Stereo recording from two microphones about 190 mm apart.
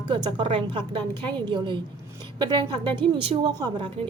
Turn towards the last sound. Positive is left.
turn(degrees=-25)  # may be behind; listen again after turning